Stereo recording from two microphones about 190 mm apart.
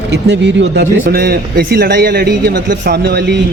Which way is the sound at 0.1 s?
65° right (ahead or behind).